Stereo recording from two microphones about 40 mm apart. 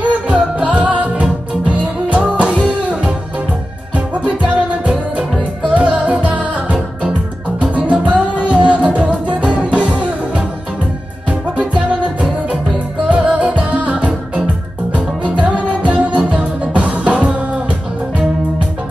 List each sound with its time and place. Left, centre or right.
0.0 s music: right